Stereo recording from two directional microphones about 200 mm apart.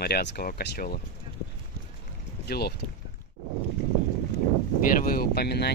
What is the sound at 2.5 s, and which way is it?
Speech, 50° left (ahead or behind).